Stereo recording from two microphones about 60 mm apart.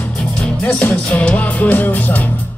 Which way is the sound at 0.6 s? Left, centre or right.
Left.